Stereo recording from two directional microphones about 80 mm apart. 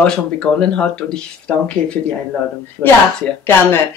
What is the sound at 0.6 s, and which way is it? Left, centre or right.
Speech, centre.